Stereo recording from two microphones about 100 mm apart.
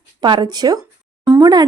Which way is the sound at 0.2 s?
50° right (ahead or behind).